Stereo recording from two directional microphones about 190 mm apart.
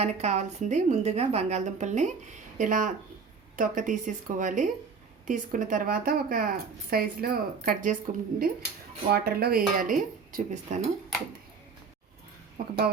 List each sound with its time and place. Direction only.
0.0 s a woman's voice: 35° right (ahead or behind)
12.6 s speech: 50° right (ahead or behind)